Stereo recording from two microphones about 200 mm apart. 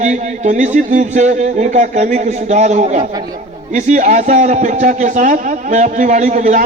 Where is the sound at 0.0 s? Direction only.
35° right (ahead or behind).